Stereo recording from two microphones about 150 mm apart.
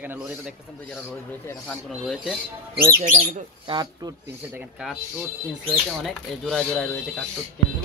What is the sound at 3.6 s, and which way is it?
Speech, 30° right (ahead or behind).